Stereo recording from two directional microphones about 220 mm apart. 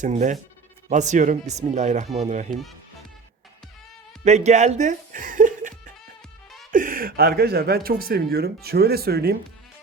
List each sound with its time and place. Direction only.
0.0 s speech: 35° right (ahead or behind)
4.2 s music: 30° right (ahead or behind)
6.7 s speech: 40° right (ahead or behind)